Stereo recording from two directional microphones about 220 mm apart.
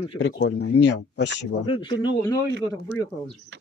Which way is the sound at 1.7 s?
20° left (ahead or behind).